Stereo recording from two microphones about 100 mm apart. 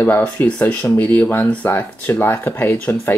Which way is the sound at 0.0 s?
20° left (ahead or behind).